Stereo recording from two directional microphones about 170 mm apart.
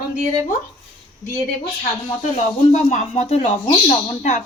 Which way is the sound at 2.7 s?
40° left (ahead or behind).